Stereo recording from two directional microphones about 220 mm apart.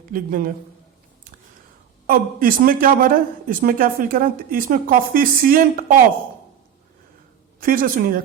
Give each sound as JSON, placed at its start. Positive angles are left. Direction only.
{"t": 0.1, "sound": "speech", "side_deg": -40}
{"t": 2.0, "sound": "speech", "side_deg": -40}
{"t": 7.6, "sound": "speech", "side_deg": -40}